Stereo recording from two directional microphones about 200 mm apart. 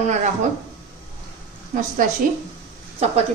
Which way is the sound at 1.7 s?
45° right (ahead or behind).